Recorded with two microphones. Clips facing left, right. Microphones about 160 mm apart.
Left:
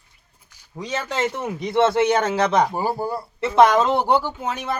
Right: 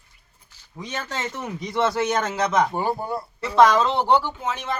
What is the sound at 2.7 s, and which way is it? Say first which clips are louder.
Speech: left 1 dB; 5° left (ahead or behind).